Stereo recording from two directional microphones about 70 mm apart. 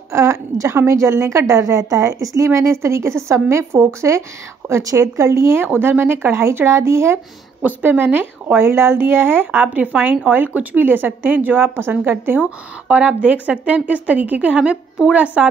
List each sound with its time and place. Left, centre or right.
0.1 s a woman's voice: right
7.6 s a woman's voice: right